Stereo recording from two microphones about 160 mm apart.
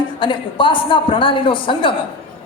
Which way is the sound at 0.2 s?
30° left (ahead or behind).